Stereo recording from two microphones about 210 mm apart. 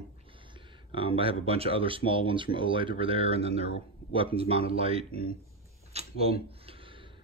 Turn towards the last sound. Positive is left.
turn(degrees=-30)  # may be behind; listen again after turning